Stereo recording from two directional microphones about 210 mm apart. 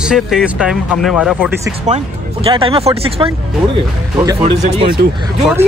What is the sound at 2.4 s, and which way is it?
Speech, 25° right (ahead or behind).